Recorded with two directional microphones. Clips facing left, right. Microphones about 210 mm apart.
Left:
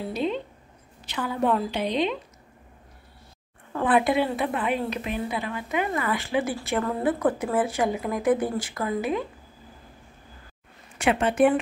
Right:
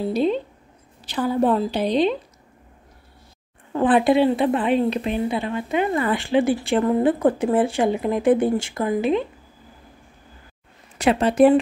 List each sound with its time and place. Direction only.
0.1 s a woman's voice: 35° right (ahead or behind)
3.7 s a woman's voice: 30° right (ahead or behind)
11.0 s a woman's voice: 35° right (ahead or behind)